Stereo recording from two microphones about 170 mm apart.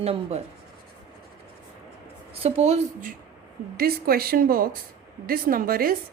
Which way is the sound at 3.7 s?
60° right (ahead or behind).